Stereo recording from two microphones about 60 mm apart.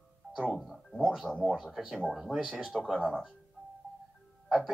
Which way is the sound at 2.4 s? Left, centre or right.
Centre.